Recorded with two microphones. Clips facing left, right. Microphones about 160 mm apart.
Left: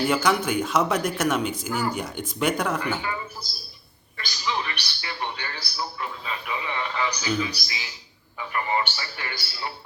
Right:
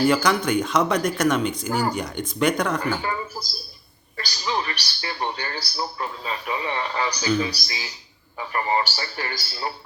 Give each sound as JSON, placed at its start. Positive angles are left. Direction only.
{"t": 0.0, "sound": "speech", "side_deg": 5}
{"t": 3.0, "sound": "a man's voice", "side_deg": -35}